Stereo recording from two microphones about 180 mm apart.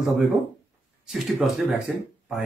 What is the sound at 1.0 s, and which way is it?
Speech, centre (ahead or behind).